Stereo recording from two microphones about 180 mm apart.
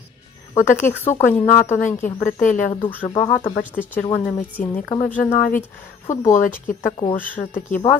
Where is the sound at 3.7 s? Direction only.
10° left (ahead or behind).